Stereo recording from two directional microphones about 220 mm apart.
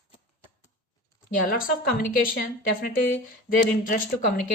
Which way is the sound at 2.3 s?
40° left (ahead or behind).